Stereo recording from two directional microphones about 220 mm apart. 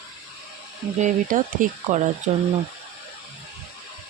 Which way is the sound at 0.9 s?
35° right (ahead or behind).